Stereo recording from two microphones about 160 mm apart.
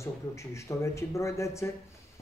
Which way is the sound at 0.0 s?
20° left (ahead or behind).